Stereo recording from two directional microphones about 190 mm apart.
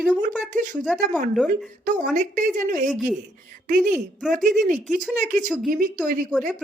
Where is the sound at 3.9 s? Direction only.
Centre (ahead or behind).